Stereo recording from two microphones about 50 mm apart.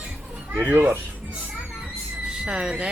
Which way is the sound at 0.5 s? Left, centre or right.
Right.